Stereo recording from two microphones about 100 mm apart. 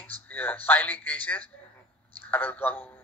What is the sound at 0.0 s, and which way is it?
A man's voice, 20° left (ahead or behind).